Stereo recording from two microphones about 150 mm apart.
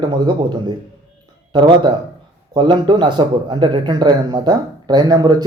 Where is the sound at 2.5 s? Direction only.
30° right (ahead or behind).